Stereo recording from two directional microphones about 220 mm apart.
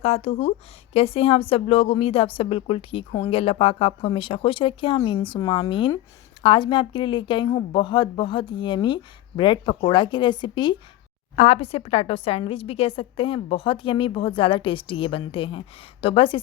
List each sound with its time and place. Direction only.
0.0 s a woman's voice: 30° left (ahead or behind)